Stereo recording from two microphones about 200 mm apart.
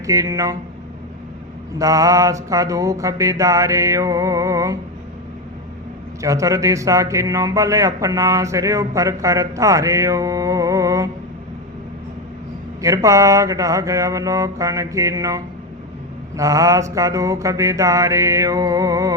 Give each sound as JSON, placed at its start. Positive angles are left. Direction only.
{"t": 0.0, "sound": "a man's voice", "side_deg": -15}
{"t": 1.8, "sound": "a man's voice", "side_deg": -15}
{"t": 6.2, "sound": "a man's voice", "side_deg": -15}
{"t": 12.8, "sound": "a man's voice", "side_deg": -15}
{"t": 16.4, "sound": "a man's voice", "side_deg": -15}